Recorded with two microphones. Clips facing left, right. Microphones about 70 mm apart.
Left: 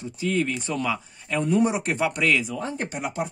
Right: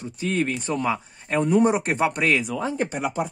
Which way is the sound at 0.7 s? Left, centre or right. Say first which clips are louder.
Right 2 dB; right.